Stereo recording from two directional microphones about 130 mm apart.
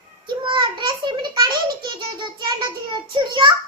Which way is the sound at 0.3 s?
40° right (ahead or behind).